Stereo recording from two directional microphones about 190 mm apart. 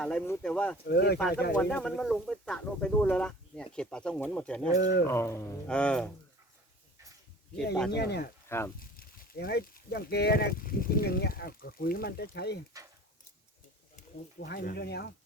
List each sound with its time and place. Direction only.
0.0 s speech: 5° left (ahead or behind)
0.9 s speech: 60° left (ahead or behind)
1.5 s speech: 5° left (ahead or behind)
4.8 s speech: 60° left (ahead or behind)
5.0 s speech: 15° left (ahead or behind)
7.9 s speech: 60° left (ahead or behind)
8.4 s speech: 15° left (ahead or behind)
8.8 s speech: 50° left (ahead or behind)
14.3 s speech: 55° left (ahead or behind)